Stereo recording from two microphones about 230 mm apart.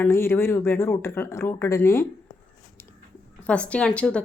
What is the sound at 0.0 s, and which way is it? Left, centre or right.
Speech, centre.